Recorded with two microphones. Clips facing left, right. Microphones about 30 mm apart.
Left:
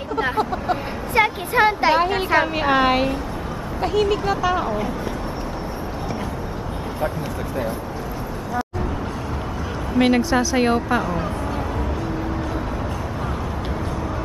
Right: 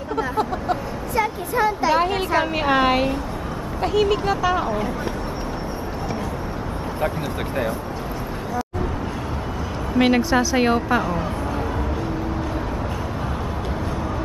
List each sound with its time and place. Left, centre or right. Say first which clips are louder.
1.1 s a sound: left 4 dB; left
2.0 s a woman's voice: left 2 dB; centre
9.9 s a woman's voice: even; centre